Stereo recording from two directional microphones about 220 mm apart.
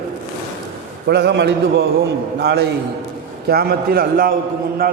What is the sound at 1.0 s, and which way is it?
A man's voice, 50° right (ahead or behind).